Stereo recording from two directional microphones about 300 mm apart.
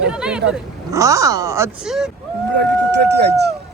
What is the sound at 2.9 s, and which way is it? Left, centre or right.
Speech, right.